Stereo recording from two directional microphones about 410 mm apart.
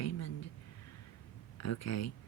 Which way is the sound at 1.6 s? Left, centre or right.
Left.